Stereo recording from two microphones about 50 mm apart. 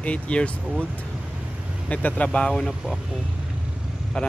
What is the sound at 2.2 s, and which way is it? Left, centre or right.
Speech, centre.